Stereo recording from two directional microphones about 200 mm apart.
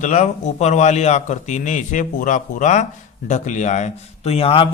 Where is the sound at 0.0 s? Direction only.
35° left (ahead or behind).